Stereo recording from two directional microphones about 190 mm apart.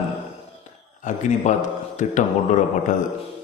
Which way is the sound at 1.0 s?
40° left (ahead or behind).